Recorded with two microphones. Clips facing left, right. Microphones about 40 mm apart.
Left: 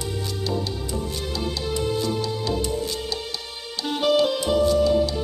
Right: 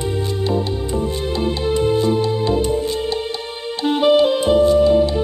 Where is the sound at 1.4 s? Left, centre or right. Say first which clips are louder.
Right 8 dB; right.